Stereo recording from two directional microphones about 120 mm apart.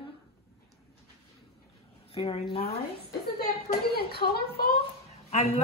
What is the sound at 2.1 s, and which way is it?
Speech, 55° left (ahead or behind).